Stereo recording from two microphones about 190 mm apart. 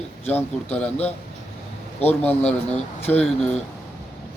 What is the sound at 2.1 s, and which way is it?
Speech, 10° left (ahead or behind).